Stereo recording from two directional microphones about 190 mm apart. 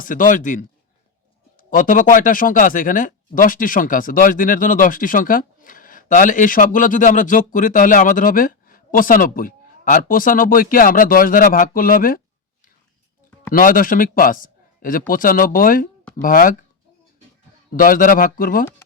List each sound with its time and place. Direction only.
0.0 s speech: 45° left (ahead or behind)
13.5 s a man's voice: 45° left (ahead or behind)
17.7 s speech: 45° left (ahead or behind)